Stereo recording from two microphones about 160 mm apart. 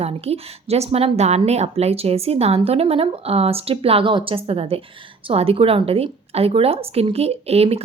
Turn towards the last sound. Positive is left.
turn(degrees=-40)  # may be behind; listen again after turning